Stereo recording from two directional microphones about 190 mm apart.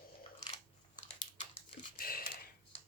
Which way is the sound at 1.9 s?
50° left (ahead or behind).